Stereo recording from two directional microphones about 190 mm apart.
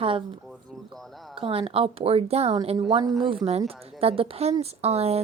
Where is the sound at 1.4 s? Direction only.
30° right (ahead or behind).